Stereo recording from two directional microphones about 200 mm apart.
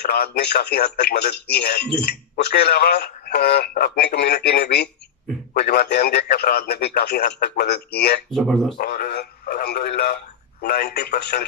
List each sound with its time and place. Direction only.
0.0 s speech: 55° left (ahead or behind)
8.3 s speech: centre (ahead or behind)
8.7 s speech: 50° left (ahead or behind)